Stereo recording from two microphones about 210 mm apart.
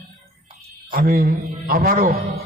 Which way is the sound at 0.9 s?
45° right (ahead or behind).